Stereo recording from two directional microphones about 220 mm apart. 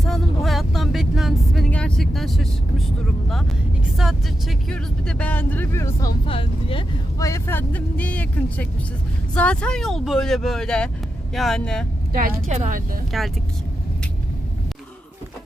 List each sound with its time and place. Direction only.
0.0 s vehicle: centre (ahead or behind)
3.9 s speech: centre (ahead or behind)
6.2 s speech: 25° left (ahead or behind); by 11.9 s 5° left (ahead or behind)
12.1 s speech: 35° right (ahead or behind)
13.1 s speech: centre (ahead or behind)